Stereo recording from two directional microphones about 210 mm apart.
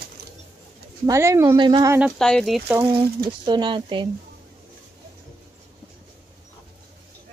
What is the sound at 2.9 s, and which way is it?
Speech, 20° right (ahead or behind).